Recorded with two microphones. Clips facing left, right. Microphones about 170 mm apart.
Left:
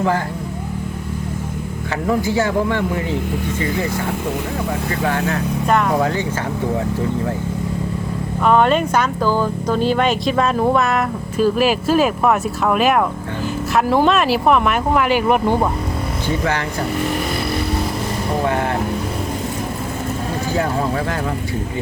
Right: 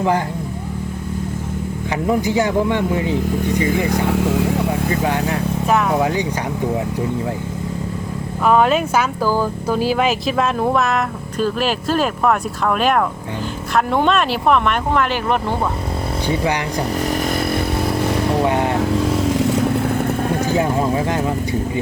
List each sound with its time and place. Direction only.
2.0 s speech: 20° right (ahead or behind)
5.6 s speech: 5° right (ahead or behind)
6.0 s speech: 15° right (ahead or behind)
8.4 s speech: 5° right (ahead or behind); by 15.5 s 10° left (ahead or behind)
18.4 s speech: 20° right (ahead or behind)
20.5 s speech: 20° right (ahead or behind)